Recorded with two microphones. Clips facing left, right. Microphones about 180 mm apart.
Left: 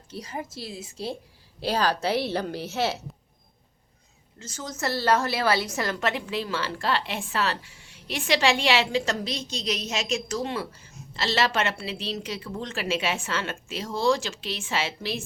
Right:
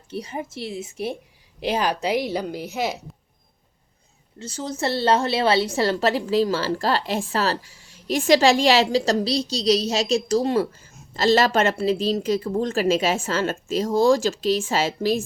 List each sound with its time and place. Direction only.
0.1 s a woman's voice: 25° right (ahead or behind)
4.4 s a woman's voice: 30° right (ahead or behind)